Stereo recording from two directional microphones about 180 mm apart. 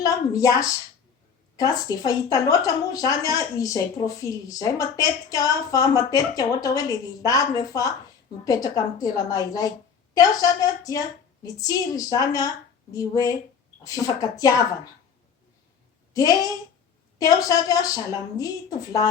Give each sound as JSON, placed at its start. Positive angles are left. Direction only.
{"t": 0.0, "sound": "a woman's voice", "side_deg": 20}
{"t": 16.1, "sound": "a woman's voice", "side_deg": 20}